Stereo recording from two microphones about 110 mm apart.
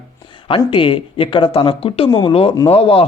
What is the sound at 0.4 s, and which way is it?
Speech, 50° left (ahead or behind).